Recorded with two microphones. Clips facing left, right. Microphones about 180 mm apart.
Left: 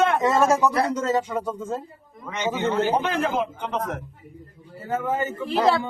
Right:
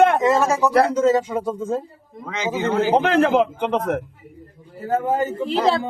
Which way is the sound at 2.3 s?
90° right.